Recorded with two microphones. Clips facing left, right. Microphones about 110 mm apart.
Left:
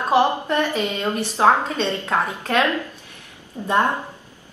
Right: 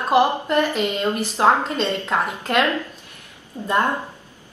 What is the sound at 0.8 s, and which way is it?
Speech, 15° left (ahead or behind).